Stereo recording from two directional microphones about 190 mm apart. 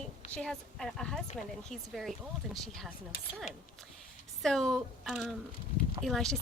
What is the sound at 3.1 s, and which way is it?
Speech, 50° left (ahead or behind).